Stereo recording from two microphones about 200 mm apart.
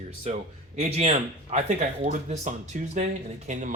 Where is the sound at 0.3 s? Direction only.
35° right (ahead or behind).